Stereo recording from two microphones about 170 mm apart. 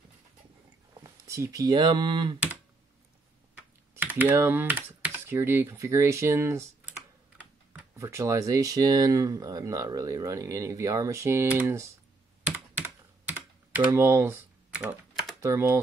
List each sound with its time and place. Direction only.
1.0 s speech: 20° right (ahead or behind)
3.5 s typing: 10° right (ahead or behind)
5.0 s speech: 15° right (ahead or behind)
12.4 s computer keyboard: 10° right (ahead or behind)
15.4 s speech: 15° right (ahead or behind)